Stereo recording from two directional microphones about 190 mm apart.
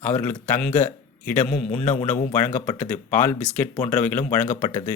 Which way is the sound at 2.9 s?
10° left (ahead or behind).